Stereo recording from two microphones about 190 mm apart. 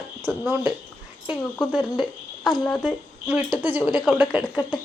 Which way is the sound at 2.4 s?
5° left (ahead or behind).